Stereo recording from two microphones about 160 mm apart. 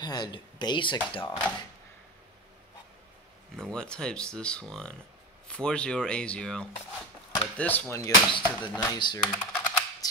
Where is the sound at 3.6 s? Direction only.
5° left (ahead or behind).